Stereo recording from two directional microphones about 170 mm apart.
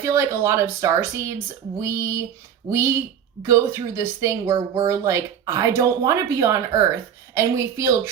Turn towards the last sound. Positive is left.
turn(degrees=-15)  # may be behind; listen again after turning